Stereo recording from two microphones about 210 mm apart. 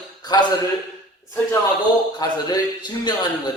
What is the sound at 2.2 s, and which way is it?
Speech, 20° left (ahead or behind).